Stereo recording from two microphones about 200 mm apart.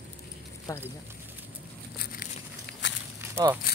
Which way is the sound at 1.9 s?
50° left (ahead or behind).